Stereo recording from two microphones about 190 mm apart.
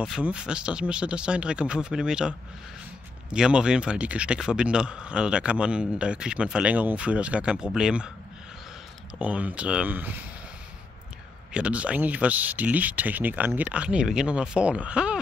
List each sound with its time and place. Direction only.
0.0 s speech: 5° right (ahead or behind)
9.2 s speech: 5° right (ahead or behind)
11.5 s speech: 5° right (ahead or behind)